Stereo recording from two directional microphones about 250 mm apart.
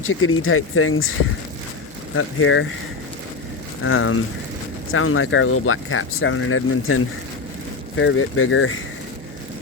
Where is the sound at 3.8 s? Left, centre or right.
Left.